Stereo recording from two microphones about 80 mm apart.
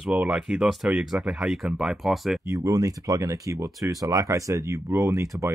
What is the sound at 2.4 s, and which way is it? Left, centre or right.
Speech, right.